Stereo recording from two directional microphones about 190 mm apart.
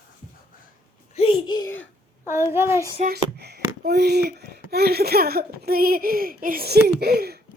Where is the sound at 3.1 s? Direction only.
60° right (ahead or behind).